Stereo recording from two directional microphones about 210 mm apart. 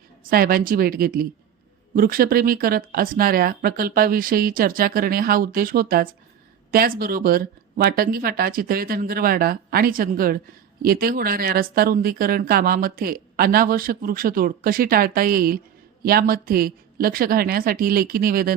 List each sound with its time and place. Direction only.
0.3 s speech: 45° right (ahead or behind)